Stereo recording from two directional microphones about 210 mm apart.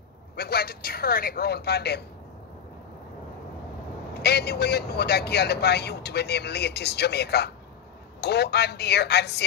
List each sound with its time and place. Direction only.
0.4 s a man's voice: 50° left (ahead or behind)
4.2 s a man's voice: 50° left (ahead or behind)